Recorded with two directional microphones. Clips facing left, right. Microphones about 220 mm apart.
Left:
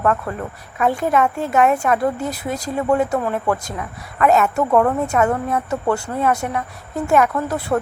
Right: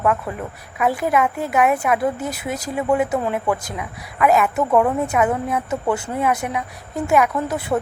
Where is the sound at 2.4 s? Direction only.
20° right (ahead or behind).